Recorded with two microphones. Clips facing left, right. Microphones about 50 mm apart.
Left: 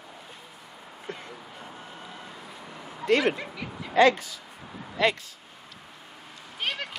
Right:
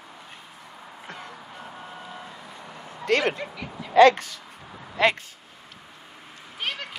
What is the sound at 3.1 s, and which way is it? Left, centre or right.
Speech, right.